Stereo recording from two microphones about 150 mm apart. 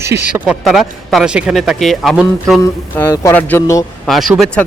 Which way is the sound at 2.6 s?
20° left (ahead or behind).